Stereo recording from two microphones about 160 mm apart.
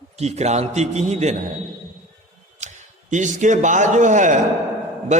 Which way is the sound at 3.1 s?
50° right (ahead or behind).